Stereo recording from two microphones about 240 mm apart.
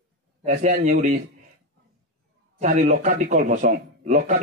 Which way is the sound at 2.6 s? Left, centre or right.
Right.